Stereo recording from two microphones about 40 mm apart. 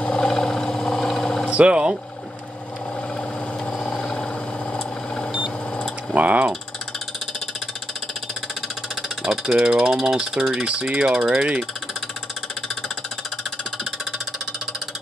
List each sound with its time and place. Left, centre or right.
0.0 s a sound: left
1.5 s speech: right
3.9 s vehicle: left
6.1 s mechanisms: right
9.2 s speech: centre
10.5 s speech: right